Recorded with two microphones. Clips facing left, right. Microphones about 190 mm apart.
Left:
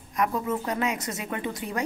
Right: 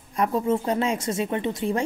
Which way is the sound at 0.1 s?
30° right (ahead or behind).